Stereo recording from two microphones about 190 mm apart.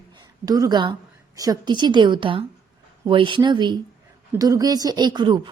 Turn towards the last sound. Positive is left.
turn(degrees=-25)  # may be behind; listen again after turning